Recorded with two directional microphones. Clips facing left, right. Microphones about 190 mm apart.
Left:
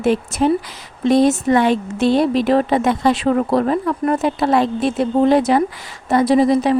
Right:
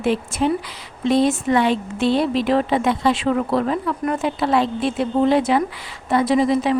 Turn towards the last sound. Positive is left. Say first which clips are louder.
# left 4 dB
turn(degrees=40)  # may be behind; listen again after turning